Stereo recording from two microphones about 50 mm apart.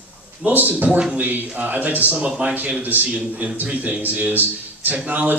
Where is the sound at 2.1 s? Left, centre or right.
Right.